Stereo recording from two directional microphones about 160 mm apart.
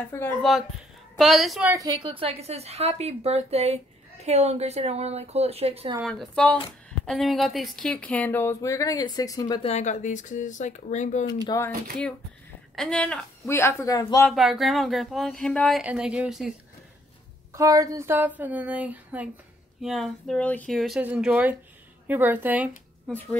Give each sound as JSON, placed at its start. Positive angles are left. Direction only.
{"t": 0.0, "sound": "speech", "side_deg": 15}
{"t": 0.4, "sound": "speech", "side_deg": 0}
{"t": 1.7, "sound": "a woman's voice", "side_deg": -20}
{"t": 2.1, "sound": "a woman's voice", "side_deg": -40}
{"t": 6.0, "sound": "speech", "side_deg": 5}
{"t": 9.6, "sound": "speech", "side_deg": 45}
{"t": 11.4, "sound": "speech", "side_deg": 20}
{"t": 12.7, "sound": "speech", "side_deg": 5}
{"t": 13.5, "sound": "speech", "side_deg": 15}
{"t": 14.3, "sound": "speech", "side_deg": 0}
{"t": 15.8, "sound": "speech", "side_deg": -5}
{"t": 17.5, "sound": "a sound", "side_deg": -20}
{"t": 19.8, "sound": "speech", "side_deg": 0}
{"t": 21.0, "sound": "a sound", "side_deg": -10}